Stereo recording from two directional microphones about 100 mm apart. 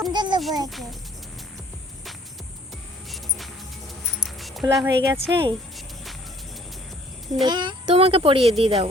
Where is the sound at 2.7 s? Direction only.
Centre (ahead or behind).